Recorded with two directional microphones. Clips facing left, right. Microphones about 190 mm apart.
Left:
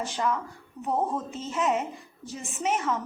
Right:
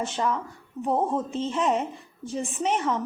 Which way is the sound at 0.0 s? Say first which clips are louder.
Right 1 dB; 25° right (ahead or behind).